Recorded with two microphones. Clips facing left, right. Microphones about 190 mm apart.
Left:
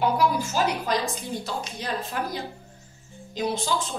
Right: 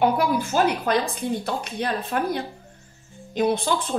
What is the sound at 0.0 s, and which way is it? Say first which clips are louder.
A woman's voice: right 2 dB; 55° right (ahead or behind).